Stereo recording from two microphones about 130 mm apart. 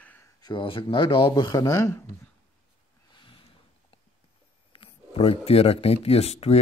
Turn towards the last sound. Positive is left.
turn(degrees=55)  # may be behind; listen again after turning